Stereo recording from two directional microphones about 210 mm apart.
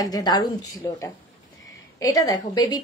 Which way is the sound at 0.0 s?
20° left (ahead or behind).